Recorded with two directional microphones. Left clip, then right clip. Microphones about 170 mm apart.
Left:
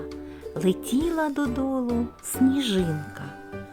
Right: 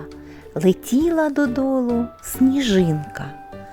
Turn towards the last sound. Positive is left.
turn(degrees=-30)  # may be behind; listen again after turning